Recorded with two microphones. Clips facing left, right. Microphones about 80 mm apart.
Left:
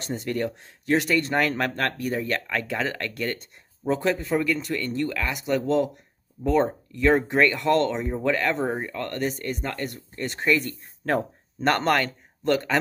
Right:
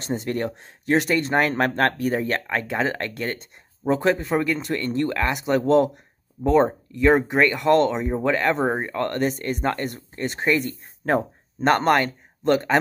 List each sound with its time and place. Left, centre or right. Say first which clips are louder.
0.0 s speech: right 2 dB; right
1.8 s speech: right 5 dB; right
6.4 s speech: right 4 dB; right
8.6 s speech: right 5 dB; right
10.1 s speech: right 1 dB; right